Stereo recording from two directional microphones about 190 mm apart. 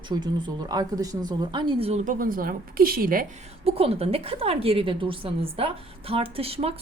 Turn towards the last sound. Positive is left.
turn(degrees=-30)  # may be behind; listen again after turning